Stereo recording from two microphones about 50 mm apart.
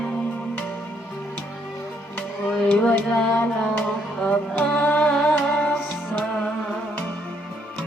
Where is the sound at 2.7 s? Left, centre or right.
Left.